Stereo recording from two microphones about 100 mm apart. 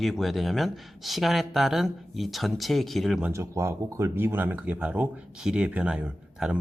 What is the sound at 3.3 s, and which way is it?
Speech, 30° right (ahead or behind).